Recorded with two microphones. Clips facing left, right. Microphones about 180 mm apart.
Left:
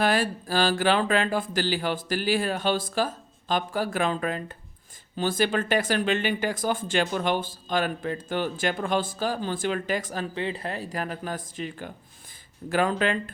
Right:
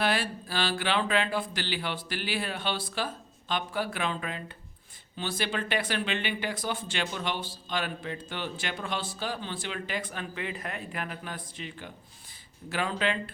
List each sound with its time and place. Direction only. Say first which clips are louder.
0.0 s speech: left 5 dB; 45° left (ahead or behind)